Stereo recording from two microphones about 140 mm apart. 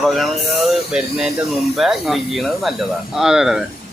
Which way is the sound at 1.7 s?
Centre (ahead or behind).